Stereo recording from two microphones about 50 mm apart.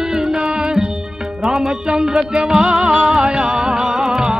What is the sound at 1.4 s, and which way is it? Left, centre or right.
Music, centre.